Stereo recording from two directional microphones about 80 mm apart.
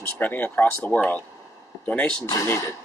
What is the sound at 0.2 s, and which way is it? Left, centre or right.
Speech, left.